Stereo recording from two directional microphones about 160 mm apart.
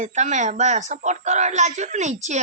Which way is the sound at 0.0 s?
50° right (ahead or behind).